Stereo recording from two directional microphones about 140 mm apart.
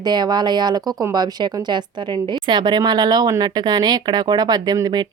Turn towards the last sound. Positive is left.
turn(degrees=-30)  # may be behind; listen again after turning